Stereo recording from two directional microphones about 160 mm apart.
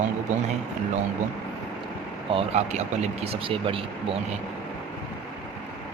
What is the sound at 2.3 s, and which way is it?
Speech, 40° right (ahead or behind).